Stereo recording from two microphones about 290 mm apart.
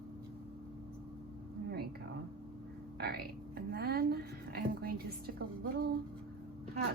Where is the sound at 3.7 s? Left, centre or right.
Right.